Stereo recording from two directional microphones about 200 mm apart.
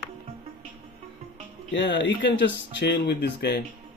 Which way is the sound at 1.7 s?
65° left (ahead or behind).